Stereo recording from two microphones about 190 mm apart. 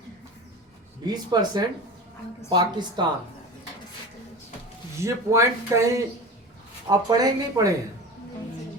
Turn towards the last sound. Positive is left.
turn(degrees=-20)  # may be behind; listen again after turning